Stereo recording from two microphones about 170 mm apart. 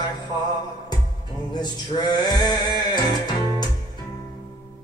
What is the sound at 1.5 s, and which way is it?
Speech, 25° left (ahead or behind).